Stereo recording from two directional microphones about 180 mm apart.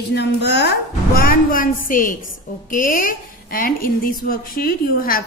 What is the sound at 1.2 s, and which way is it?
A woman's voice, 50° left (ahead or behind).